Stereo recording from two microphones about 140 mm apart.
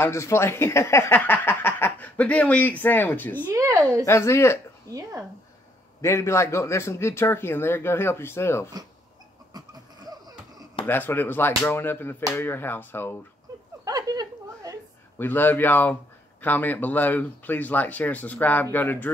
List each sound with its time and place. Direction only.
0.0 s speech: 20° left (ahead or behind)
3.5 s speech: 25° right (ahead or behind)
4.0 s speech: 20° left (ahead or behind)
5.9 s speech: 20° left (ahead or behind)
9.5 s a sound: 30° right (ahead or behind)
10.9 s speech: 15° left (ahead or behind)
13.8 s a sound: 25° right (ahead or behind)
15.1 s speech: 15° left (ahead or behind)